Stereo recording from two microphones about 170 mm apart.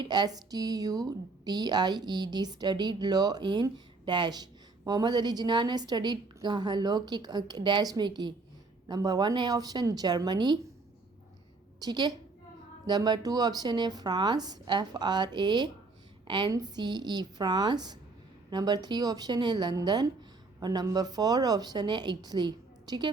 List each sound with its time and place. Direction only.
0.0 s a woman's voice: 25° right (ahead or behind)
11.8 s a woman's voice: 25° right (ahead or behind)